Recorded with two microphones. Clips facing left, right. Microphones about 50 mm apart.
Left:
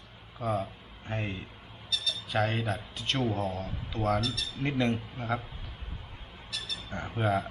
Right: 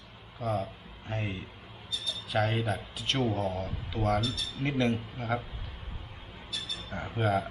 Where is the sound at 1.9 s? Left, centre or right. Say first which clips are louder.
Left 4 dB; left.